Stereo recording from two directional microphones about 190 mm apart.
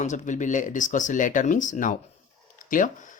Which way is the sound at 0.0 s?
40° left (ahead or behind).